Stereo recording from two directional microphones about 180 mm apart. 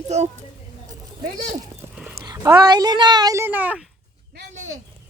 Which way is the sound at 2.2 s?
20° right (ahead or behind).